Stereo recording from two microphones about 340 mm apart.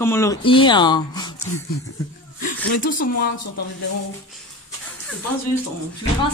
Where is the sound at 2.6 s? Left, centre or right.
Left.